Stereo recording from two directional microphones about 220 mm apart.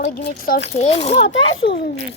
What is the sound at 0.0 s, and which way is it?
Speech, 50° left (ahead or behind).